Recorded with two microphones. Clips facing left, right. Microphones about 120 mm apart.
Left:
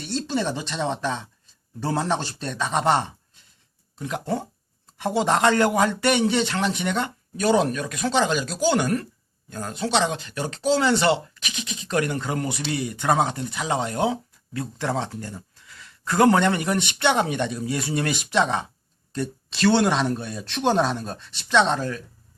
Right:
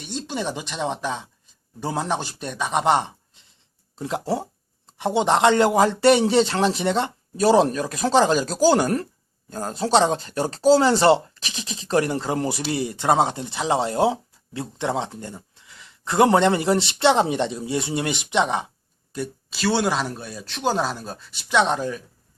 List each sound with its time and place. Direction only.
0.0 s speech: 15° right (ahead or behind)
3.9 s speech: 30° right (ahead or behind); by 22.0 s 15° right (ahead or behind)